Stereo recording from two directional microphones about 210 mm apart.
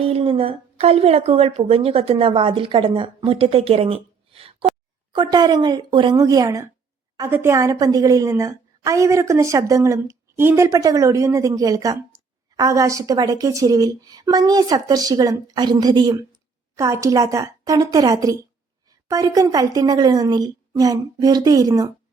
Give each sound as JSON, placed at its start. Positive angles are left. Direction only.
{"t": 0.0, "sound": "a woman's voice", "side_deg": -30}